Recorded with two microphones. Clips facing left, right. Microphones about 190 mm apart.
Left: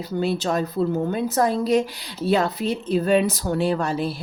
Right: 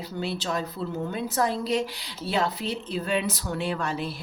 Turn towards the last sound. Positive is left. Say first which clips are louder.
# left 7 dB
turn(degrees=35)  # may be behind; listen again after turning